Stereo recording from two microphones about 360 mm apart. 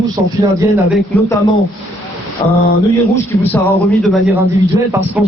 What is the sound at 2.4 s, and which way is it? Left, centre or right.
Speech, centre.